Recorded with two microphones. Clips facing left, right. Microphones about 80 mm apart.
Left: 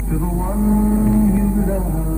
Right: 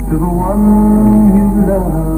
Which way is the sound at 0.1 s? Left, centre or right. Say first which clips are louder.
Right 9 dB; right.